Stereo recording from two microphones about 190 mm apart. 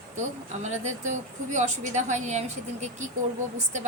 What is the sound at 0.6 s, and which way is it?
A woman's voice, 40° right (ahead or behind).